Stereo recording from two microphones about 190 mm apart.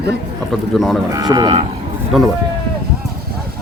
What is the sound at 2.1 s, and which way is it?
Speech, centre (ahead or behind).